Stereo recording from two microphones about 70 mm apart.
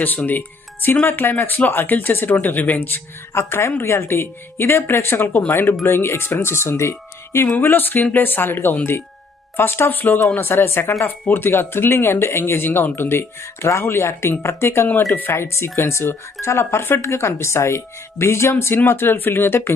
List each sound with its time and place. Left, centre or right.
0.0 s speech: left